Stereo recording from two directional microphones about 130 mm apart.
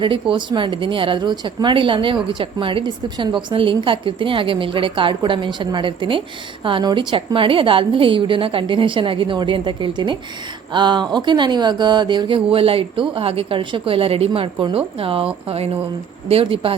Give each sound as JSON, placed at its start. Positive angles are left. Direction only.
{"t": 0.0, "sound": "speech", "side_deg": -40}